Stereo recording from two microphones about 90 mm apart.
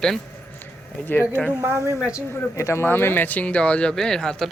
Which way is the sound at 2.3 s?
30° left (ahead or behind).